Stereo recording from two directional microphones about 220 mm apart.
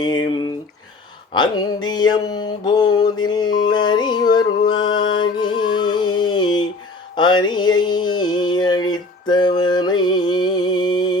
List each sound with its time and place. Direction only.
0.0 s speech: 20° left (ahead or behind)
1.3 s mantra: 20° left (ahead or behind)
7.2 s a sound: 20° left (ahead or behind)